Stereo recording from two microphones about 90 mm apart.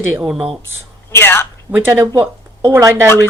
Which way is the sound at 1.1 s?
25° left (ahead or behind).